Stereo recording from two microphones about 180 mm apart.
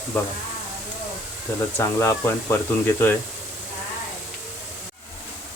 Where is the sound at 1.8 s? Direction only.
10° left (ahead or behind).